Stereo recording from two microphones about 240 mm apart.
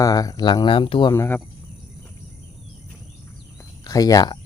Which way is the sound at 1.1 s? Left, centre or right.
Centre.